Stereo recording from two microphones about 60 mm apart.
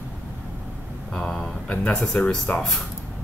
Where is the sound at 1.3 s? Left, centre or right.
Centre.